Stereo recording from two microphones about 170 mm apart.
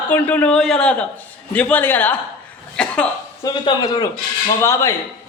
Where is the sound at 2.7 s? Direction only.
5° left (ahead or behind).